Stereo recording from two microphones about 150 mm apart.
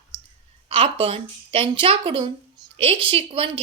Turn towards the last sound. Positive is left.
turn(degrees=-35)  # may be behind; listen again after turning